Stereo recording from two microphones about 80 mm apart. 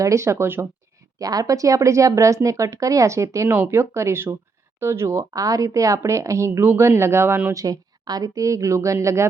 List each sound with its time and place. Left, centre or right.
0.0 s speech: right
1.2 s speech: right
7.5 s speech: right